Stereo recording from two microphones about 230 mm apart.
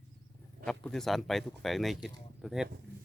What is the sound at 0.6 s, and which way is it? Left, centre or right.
A man's voice, centre.